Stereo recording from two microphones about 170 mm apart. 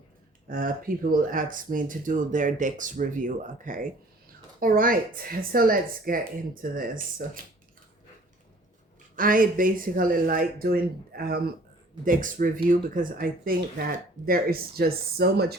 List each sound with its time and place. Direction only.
0.4 s speech: 55° right (ahead or behind)
9.1 s speech: 55° right (ahead or behind)